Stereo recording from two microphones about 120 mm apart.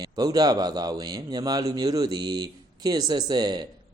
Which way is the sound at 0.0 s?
35° right (ahead or behind).